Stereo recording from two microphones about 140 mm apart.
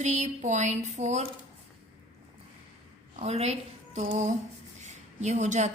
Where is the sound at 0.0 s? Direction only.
55° right (ahead or behind).